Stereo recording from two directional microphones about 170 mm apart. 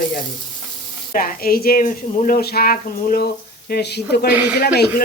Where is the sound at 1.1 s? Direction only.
55° left (ahead or behind).